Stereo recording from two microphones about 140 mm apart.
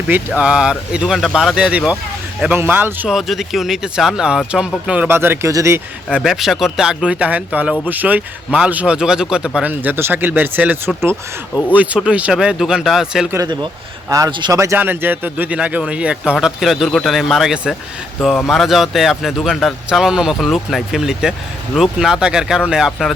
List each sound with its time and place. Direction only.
0.1 s speech: 10° right (ahead or behind)
3.1 s speech: centre (ahead or behind); by 5.8 s 20° right (ahead or behind)
6.1 s speech: 5° right (ahead or behind)
13.3 s speech: 30° right (ahead or behind); by 23.1 s 5° left (ahead or behind)